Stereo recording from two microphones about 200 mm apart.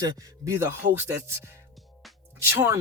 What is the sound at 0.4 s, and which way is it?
Speech, 10° right (ahead or behind).